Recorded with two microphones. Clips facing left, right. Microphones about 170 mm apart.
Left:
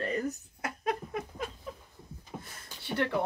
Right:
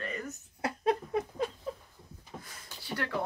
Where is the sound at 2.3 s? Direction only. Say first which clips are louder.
Left 2 dB; 25° left (ahead or behind).